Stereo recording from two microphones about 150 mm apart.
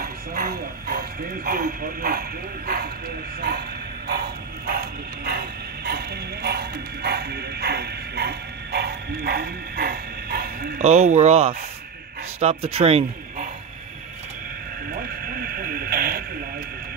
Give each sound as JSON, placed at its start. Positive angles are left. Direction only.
{"t": 0.0, "sound": "speech", "side_deg": -80}
{"t": 4.1, "sound": "bow-wow", "side_deg": -90}
{"t": 10.8, "sound": "speech", "side_deg": -45}
{"t": 14.9, "sound": "speech", "side_deg": -80}